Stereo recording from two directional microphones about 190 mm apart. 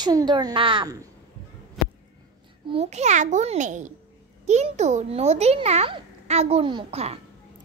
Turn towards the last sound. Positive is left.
turn(degrees=-30)  # may be behind; listen again after turning